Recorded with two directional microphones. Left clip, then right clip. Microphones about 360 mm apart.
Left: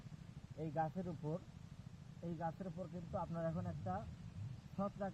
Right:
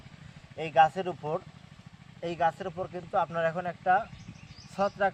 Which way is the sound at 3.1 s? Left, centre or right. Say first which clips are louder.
Right 16 dB; right.